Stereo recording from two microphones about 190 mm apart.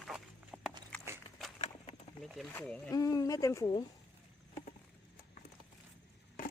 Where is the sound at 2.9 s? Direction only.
20° left (ahead or behind).